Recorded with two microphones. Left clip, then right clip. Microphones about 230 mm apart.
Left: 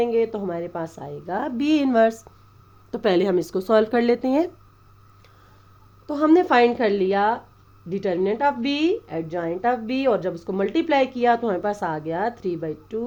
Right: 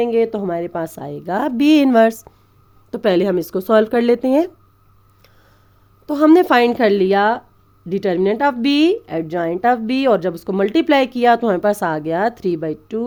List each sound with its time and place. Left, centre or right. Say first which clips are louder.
0.0 s speech: right 5 dB; right
6.1 s speech: right 6 dB; right